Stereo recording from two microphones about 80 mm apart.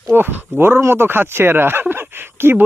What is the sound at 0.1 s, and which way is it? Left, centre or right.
Speech, right.